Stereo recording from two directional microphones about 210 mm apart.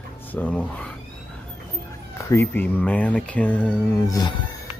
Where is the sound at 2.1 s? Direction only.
10° left (ahead or behind).